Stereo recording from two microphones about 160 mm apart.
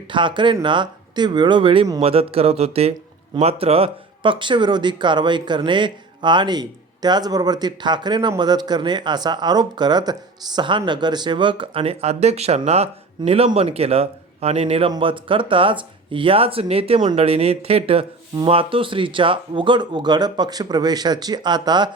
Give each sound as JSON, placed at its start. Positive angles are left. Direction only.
{"t": 0.1, "sound": "a man's voice", "side_deg": -30}